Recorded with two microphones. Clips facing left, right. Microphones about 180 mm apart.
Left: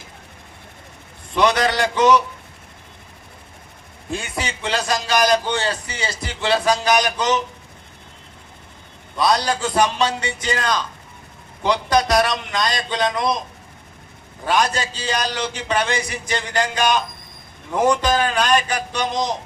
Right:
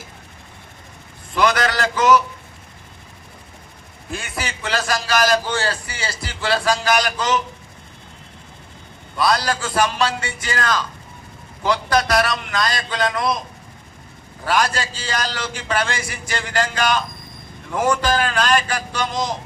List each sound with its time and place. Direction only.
1.4 s a man's voice: 20° left (ahead or behind)
4.1 s a man's voice: 25° left (ahead or behind)
9.1 s a man's voice: 20° left (ahead or behind)
14.4 s a man's voice: 20° left (ahead or behind)